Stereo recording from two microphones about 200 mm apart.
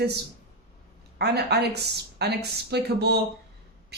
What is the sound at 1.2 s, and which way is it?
Speech, 55° right (ahead or behind).